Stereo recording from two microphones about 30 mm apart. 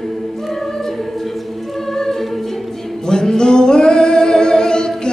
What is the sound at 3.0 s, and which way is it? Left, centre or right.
Singing, left.